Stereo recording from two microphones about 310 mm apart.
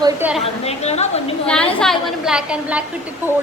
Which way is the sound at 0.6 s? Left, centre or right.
Left.